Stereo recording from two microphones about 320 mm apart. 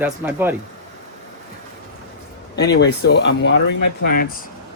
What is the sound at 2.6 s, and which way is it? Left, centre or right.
Speech, left.